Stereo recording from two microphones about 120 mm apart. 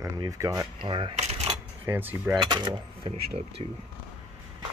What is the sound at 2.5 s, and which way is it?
Speech, 40° right (ahead or behind).